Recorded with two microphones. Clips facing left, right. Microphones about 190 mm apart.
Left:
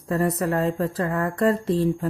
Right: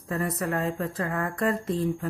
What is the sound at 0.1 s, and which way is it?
Speech, 35° left (ahead or behind).